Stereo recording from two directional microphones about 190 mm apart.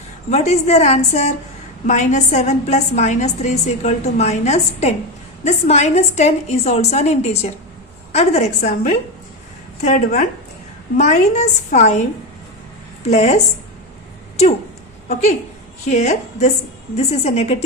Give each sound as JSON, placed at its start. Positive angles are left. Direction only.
{"t": 0.3, "sound": "a woman's voice", "side_deg": 35}
{"t": 13.1, "sound": "a woman's voice", "side_deg": 35}
{"t": 15.1, "sound": "a woman's voice", "side_deg": 35}